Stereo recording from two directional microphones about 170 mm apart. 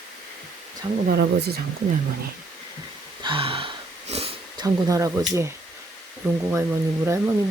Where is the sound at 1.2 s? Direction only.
75° right (ahead or behind).